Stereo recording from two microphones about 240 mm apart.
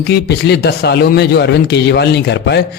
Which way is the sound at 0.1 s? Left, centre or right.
Left.